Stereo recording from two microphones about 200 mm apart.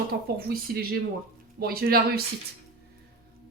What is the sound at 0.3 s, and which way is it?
A woman's voice, 50° right (ahead or behind).